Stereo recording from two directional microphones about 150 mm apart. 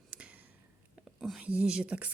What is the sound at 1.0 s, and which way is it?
Speech, centre (ahead or behind).